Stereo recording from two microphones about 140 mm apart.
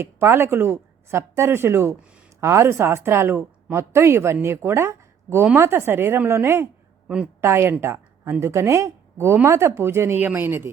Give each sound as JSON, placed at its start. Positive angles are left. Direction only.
{"t": 0.0, "sound": "a woman's voice", "side_deg": -20}